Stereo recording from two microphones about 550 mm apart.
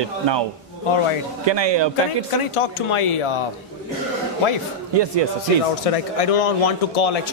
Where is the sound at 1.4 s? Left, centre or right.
Right.